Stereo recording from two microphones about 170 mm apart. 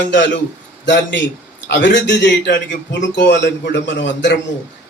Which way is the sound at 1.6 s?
90° left.